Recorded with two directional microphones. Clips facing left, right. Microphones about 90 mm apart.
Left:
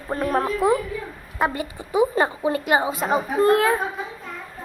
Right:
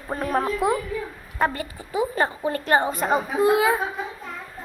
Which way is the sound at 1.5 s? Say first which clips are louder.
Left 5 dB; 20° left (ahead or behind).